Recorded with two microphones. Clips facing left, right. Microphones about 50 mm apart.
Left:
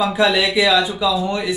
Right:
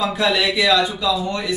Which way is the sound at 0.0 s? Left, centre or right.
Centre.